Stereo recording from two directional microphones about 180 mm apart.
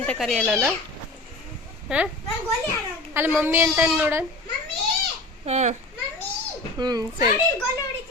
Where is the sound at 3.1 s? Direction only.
10° right (ahead or behind).